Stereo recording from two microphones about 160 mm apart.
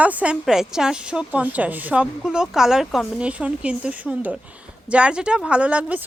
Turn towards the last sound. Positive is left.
turn(degrees=-10)  # may be behind; listen again after turning